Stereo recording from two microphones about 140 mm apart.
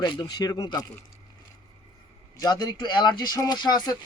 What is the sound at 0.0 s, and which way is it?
Speech, 30° left (ahead or behind).